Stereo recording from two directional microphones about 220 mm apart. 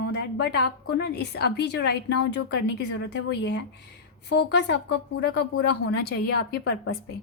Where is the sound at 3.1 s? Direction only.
50° left (ahead or behind).